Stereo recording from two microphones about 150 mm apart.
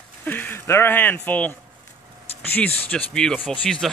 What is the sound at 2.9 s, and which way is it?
Speech, 5° left (ahead or behind).